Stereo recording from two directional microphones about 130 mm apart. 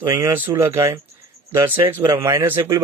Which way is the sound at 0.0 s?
25° right (ahead or behind).